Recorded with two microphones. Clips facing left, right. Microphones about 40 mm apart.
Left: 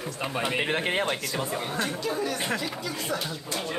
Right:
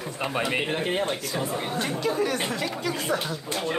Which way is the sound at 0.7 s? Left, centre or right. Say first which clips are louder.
Even; left.